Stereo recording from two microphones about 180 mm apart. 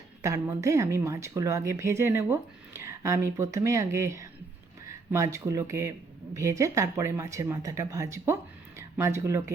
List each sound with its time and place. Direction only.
0.2 s speech: 15° right (ahead or behind)